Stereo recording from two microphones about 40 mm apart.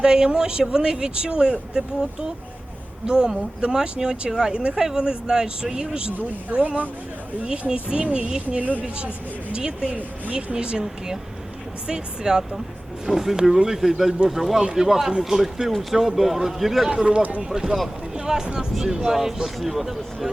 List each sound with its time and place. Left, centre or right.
0.0 s speech: centre
6.5 s speech: right
7.7 s speech: right; by 16.9 s centre
16.9 s speech: centre